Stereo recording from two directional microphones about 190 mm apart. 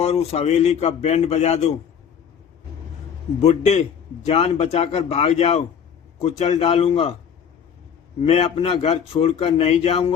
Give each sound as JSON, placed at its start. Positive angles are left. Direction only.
{"t": 0.0, "sound": "a man's voice", "side_deg": 35}
{"t": 3.4, "sound": "a man's voice", "side_deg": 35}
{"t": 8.2, "sound": "a man's voice", "side_deg": 30}